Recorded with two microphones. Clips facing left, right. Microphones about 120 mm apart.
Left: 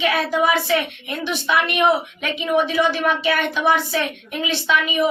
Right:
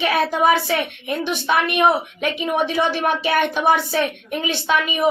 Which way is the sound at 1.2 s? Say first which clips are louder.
Even; 50° right (ahead or behind).